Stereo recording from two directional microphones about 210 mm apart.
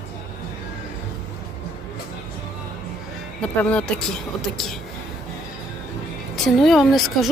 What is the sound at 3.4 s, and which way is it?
Speech, 5° left (ahead or behind).